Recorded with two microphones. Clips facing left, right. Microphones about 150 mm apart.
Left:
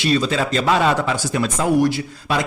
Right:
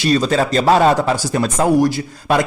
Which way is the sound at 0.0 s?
40° right (ahead or behind).